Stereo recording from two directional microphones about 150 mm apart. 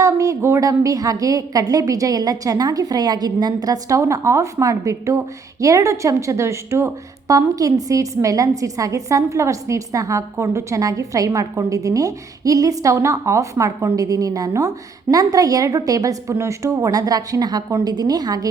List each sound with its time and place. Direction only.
0.0 s a woman's voice: 20° right (ahead or behind)